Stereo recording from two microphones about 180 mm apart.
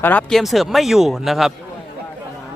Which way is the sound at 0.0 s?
10° left (ahead or behind).